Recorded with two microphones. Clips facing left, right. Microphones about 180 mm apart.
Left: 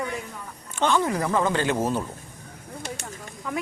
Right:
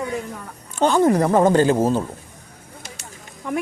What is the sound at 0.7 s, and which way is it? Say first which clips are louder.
A woman's voice: right 7 dB; 40° right (ahead or behind).